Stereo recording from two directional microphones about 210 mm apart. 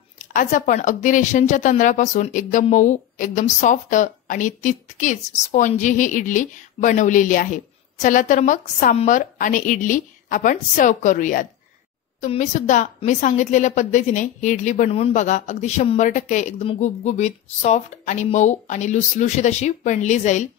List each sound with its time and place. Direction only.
0.3 s a woman's voice: 40° left (ahead or behind)